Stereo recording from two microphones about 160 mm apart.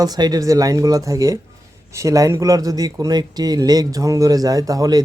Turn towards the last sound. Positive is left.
turn(degrees=-25)  # may be behind; listen again after turning